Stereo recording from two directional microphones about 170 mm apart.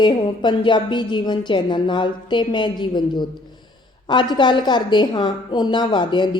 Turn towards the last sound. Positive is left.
turn(degrees=25)  # may be behind; listen again after turning